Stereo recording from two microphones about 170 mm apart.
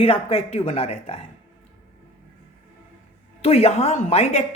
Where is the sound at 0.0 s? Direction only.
35° left (ahead or behind).